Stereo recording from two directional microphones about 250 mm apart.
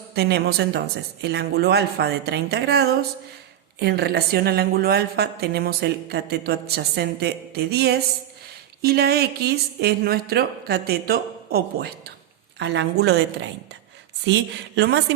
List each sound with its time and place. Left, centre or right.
0.1 s a woman's voice: right